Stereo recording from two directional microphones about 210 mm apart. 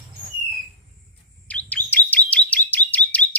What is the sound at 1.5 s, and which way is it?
Chirp, 5° left (ahead or behind).